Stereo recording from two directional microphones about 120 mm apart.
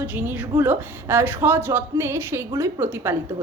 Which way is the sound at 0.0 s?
15° right (ahead or behind).